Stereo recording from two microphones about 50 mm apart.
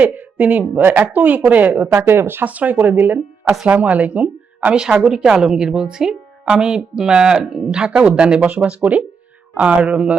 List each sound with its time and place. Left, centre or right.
0.0 s a woman's voice: right
1.9 s speech: right
2.4 s a woman's voice: right
3.7 s speech: right
4.7 s a woman's voice: centre